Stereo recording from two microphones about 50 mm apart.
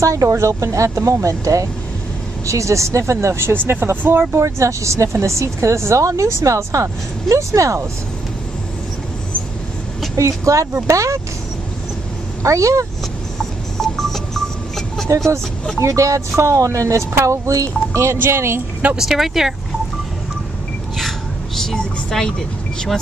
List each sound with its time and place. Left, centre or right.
0.0 s speech: right
3.9 s speech: right
10.1 s speech: right
12.4 s speech: right
13.4 s a sound: centre
15.1 s speech: right
18.1 s speech: right
18.9 s speech: centre
21.5 s vehicle: centre